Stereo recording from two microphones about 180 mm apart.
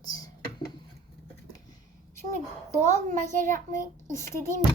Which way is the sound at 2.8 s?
15° left (ahead or behind).